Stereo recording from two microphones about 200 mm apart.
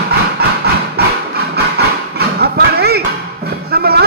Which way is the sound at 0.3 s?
50° right (ahead or behind).